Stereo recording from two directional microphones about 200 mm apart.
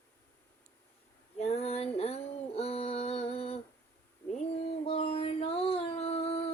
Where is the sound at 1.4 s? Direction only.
30° left (ahead or behind).